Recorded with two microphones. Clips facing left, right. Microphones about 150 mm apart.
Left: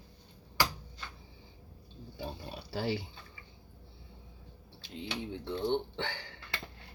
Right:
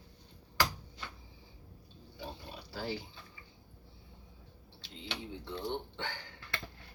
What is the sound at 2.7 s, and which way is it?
Speech, 75° left (ahead or behind).